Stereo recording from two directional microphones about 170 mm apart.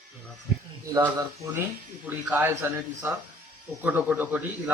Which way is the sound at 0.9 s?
20° right (ahead or behind).